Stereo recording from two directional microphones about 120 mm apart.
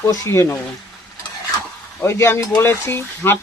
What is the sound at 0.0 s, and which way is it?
Speech, 25° left (ahead or behind).